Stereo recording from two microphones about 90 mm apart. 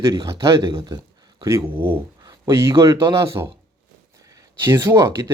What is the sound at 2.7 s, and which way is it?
Speech, 40° right (ahead or behind).